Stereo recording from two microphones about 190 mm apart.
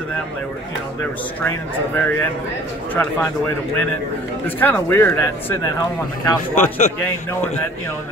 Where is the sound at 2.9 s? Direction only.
10° left (ahead or behind).